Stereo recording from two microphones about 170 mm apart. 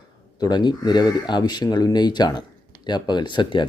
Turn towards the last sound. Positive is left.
turn(degrees=25)  # may be behind; listen again after turning